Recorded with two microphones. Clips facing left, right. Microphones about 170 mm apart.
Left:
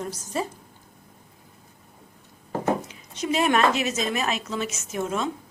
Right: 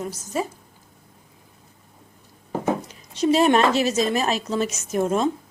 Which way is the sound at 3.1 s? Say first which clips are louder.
Right 5 dB; 30° right (ahead or behind).